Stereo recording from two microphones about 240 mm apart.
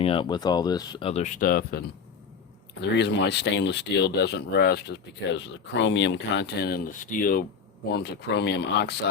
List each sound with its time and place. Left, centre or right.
0.0 s speech: left
2.8 s speech: left